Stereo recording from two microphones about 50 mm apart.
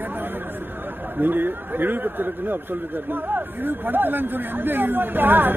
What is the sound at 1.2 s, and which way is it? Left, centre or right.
Speech, right.